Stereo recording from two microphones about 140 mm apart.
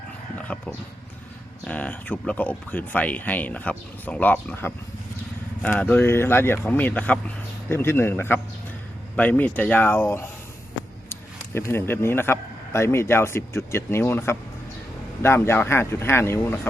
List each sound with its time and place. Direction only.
0.3 s dog: 10° left (ahead or behind)
1.6 s a man's voice: 10° left (ahead or behind)